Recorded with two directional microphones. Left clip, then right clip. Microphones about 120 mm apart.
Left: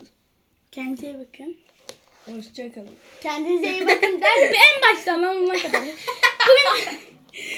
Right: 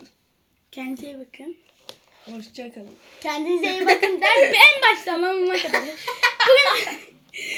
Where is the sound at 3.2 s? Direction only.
Centre (ahead or behind).